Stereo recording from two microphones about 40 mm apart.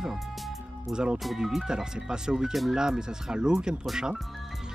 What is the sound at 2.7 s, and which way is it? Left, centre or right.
Speech, centre.